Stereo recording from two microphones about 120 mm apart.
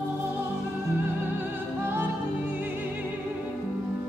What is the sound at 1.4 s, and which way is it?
Opera, 20° right (ahead or behind).